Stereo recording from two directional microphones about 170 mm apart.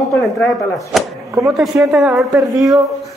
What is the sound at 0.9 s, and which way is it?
A woman's voice, centre (ahead or behind).